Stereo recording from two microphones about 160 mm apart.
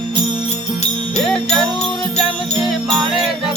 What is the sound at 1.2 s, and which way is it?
Jingle bell, 5° left (ahead or behind).